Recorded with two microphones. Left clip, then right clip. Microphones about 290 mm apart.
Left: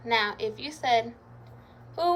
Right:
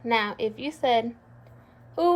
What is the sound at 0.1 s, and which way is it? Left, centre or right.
A woman's voice, right.